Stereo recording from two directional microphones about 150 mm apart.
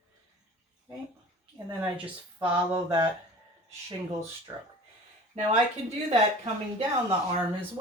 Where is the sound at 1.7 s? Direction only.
10° right (ahead or behind).